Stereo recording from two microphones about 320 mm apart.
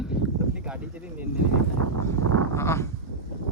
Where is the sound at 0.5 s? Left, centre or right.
Centre.